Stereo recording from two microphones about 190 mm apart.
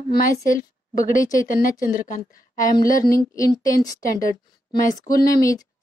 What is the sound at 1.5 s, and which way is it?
Speech, 45° left (ahead or behind).